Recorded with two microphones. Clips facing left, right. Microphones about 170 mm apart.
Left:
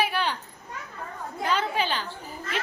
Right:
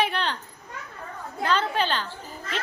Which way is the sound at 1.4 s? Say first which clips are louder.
Right 2 dB; 10° left (ahead or behind).